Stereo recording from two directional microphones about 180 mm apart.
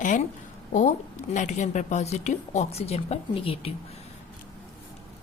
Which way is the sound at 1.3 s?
40° left (ahead or behind).